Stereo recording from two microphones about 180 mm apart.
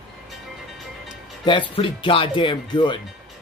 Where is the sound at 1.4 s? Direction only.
25° left (ahead or behind).